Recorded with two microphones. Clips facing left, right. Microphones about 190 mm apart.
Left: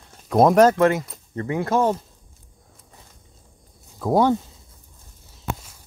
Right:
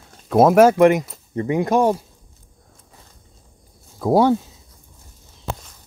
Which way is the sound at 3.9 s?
10° right (ahead or behind).